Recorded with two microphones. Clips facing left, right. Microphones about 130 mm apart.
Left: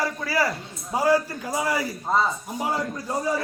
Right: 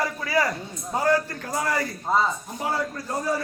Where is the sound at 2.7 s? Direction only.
15° left (ahead or behind).